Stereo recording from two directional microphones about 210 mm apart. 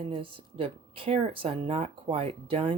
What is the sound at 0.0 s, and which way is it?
Speech, 25° right (ahead or behind).